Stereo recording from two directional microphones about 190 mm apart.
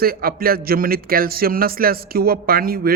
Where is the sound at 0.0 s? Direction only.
50° right (ahead or behind).